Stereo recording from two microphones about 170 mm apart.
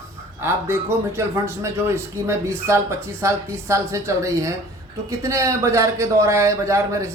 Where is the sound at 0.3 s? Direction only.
15° right (ahead or behind).